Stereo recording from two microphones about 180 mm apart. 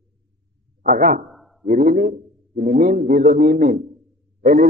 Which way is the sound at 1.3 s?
Centre (ahead or behind).